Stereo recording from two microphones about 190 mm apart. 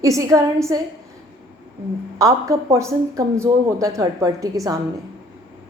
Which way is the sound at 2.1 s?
15° right (ahead or behind).